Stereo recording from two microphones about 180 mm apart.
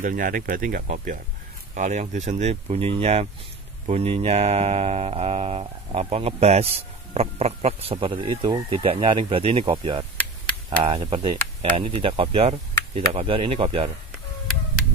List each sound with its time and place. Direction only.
0.0 s speech: 50° right (ahead or behind); by 13.8 s 30° right (ahead or behind)